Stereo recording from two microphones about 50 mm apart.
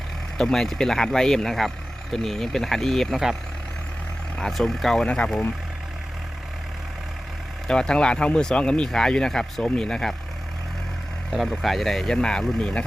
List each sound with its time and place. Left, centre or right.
0.3 s speech: centre
4.4 s speech: centre
5.0 s speech: left
7.7 s speech: centre
11.3 s speech: centre